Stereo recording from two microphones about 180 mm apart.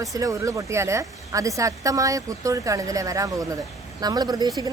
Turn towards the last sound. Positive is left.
turn(degrees=-20)  # may be behind; listen again after turning